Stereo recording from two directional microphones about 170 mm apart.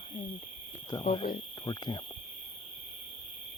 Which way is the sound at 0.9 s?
30° left (ahead or behind).